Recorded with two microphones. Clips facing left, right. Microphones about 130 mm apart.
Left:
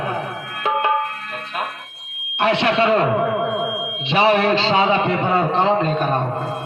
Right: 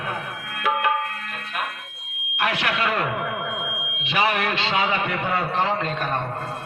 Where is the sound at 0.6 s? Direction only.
30° left (ahead or behind).